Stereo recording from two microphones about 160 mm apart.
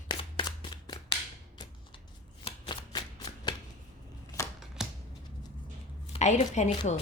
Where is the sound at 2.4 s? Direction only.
30° left (ahead or behind).